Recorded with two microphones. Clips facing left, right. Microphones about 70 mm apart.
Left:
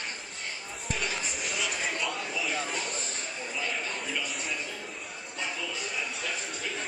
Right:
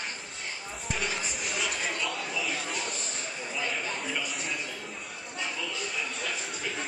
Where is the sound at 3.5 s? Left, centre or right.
Centre.